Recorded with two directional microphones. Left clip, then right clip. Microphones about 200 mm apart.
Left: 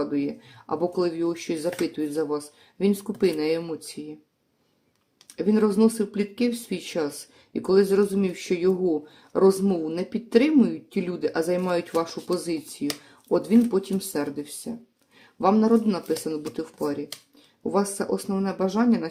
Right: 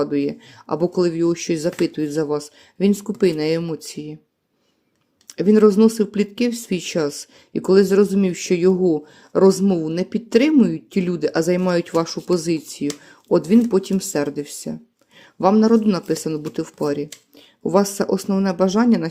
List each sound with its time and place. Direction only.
0.0 s speech: 40° right (ahead or behind)
5.3 s speech: 35° right (ahead or behind)